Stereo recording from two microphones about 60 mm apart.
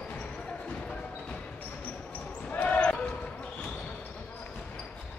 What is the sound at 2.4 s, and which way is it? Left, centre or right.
Basketball bounce, left.